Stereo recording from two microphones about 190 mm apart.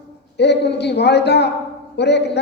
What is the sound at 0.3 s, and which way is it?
A woman's voice, 65° left (ahead or behind).